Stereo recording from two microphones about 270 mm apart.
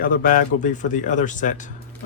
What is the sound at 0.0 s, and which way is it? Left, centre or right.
Speech, left.